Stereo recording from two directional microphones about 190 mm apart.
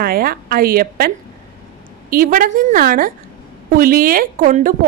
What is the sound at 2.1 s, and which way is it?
A woman's voice, 50° right (ahead or behind).